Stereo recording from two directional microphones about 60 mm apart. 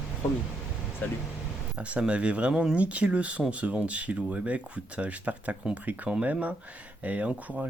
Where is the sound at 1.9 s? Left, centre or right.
Right.